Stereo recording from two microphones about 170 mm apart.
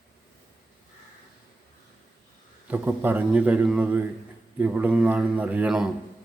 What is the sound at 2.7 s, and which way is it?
A man's voice, 10° right (ahead or behind).